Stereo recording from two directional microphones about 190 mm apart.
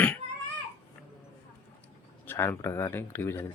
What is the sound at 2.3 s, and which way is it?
Speech, 10° left (ahead or behind).